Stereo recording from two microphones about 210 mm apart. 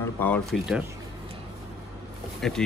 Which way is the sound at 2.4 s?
Centre (ahead or behind).